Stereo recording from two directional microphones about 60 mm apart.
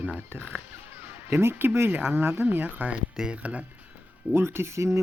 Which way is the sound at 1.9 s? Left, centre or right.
Right.